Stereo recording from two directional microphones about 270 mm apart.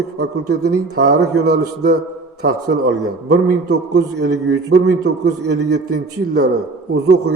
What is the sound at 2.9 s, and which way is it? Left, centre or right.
A man's voice, right.